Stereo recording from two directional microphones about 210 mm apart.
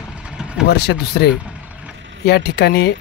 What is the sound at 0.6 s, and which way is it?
Speech, 50° left (ahead or behind).